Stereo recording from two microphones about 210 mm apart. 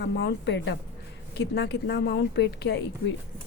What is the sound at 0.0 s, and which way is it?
A woman's voice, 50° left (ahead or behind).